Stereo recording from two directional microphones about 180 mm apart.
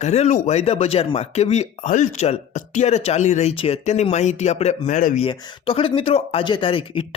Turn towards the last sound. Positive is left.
turn(degrees=30)  # may be behind; listen again after turning